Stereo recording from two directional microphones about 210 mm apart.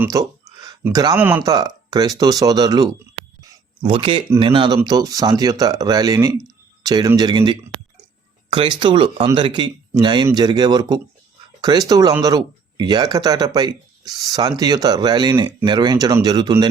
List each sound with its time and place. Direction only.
0.0 s speech: 15° right (ahead or behind)
3.4 s a sound: 25° right (ahead or behind)
4.4 s speech: 25° right (ahead or behind)